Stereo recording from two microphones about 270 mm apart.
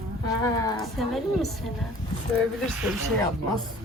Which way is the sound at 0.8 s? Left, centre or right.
Centre.